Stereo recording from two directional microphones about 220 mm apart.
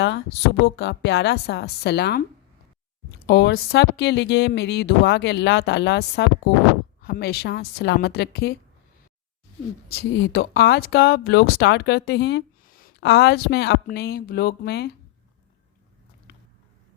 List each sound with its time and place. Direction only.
0.6 s speech: 50° left (ahead or behind)
3.2 s speech: 50° left (ahead or behind)
9.9 s speech: 50° left (ahead or behind)